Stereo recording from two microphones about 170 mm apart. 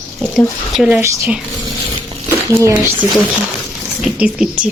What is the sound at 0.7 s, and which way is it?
Speech, 5° right (ahead or behind).